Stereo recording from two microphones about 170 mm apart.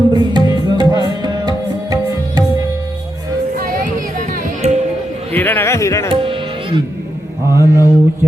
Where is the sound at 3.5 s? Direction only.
55° right (ahead or behind).